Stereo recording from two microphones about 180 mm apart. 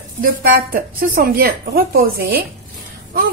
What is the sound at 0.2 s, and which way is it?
A woman's voice, 55° right (ahead or behind).